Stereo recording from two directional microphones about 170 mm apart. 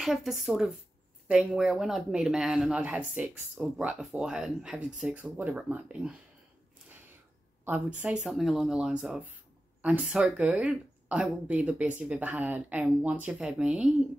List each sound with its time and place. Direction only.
0.0 s speech: centre (ahead or behind)
7.6 s speech: 10° right (ahead or behind)